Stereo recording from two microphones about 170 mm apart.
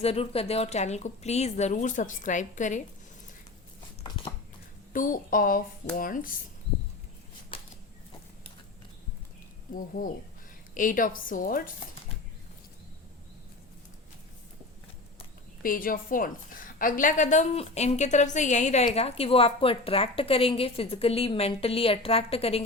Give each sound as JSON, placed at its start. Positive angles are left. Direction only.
{"t": 0.0, "sound": "a woman's voice", "side_deg": 35}
{"t": 4.9, "sound": "speech", "side_deg": 55}
{"t": 10.0, "sound": "a woman's voice", "side_deg": 55}
{"t": 15.6, "sound": "a woman's voice", "side_deg": 55}